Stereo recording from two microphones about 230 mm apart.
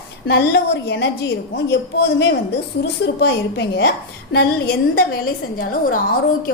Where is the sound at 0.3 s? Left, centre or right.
Left.